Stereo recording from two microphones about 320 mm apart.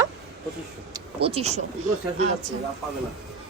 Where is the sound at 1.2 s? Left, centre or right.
Centre.